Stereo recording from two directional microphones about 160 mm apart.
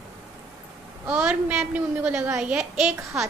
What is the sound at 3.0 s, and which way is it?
Speech, 20° right (ahead or behind).